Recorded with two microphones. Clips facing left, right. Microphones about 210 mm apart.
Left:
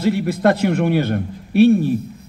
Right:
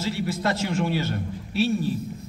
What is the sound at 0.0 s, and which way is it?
A man's voice, 60° left (ahead or behind).